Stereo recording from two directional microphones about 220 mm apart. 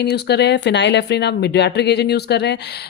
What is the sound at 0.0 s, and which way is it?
Speech, 50° left (ahead or behind).